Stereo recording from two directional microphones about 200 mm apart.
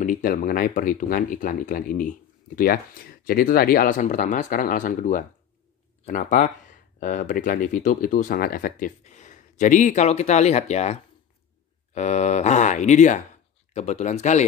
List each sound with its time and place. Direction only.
0.0 s speech: 40° left (ahead or behind)